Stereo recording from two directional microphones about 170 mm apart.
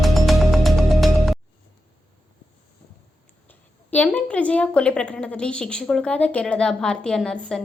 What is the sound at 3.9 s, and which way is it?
A woman's voice, 10° left (ahead or behind).